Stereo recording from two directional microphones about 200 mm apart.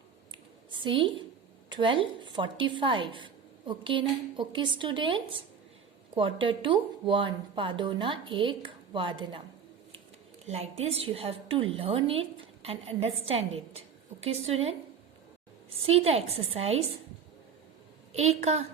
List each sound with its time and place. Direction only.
0.8 s a woman's voice: 25° right (ahead or behind)
10.4 s a woman's voice: 30° right (ahead or behind)
15.9 s a woman's voice: 30° right (ahead or behind)
18.1 s a woman's voice: 30° right (ahead or behind)